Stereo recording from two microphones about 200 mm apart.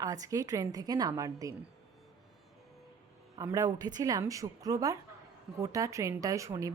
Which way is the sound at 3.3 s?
15° right (ahead or behind).